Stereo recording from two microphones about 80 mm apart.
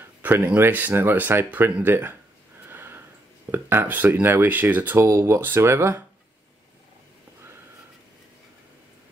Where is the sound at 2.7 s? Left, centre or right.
Right.